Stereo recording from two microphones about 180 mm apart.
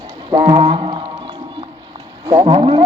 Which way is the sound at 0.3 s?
25° right (ahead or behind).